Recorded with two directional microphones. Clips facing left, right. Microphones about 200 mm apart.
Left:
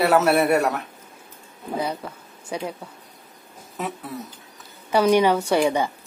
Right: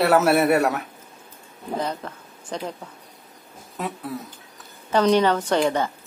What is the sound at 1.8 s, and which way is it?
Speech, 10° left (ahead or behind).